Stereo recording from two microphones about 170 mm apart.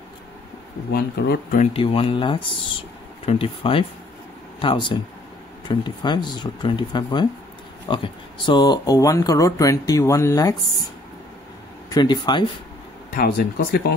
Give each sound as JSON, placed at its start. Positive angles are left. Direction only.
{"t": 0.9, "sound": "speech", "side_deg": 65}
{"t": 1.6, "sound": "speech", "side_deg": 35}
{"t": 11.9, "sound": "speech", "side_deg": 25}
{"t": 13.1, "sound": "speech", "side_deg": 60}